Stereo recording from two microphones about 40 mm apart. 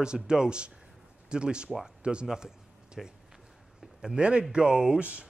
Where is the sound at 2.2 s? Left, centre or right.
Centre.